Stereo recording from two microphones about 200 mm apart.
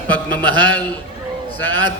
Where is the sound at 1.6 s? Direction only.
80° right.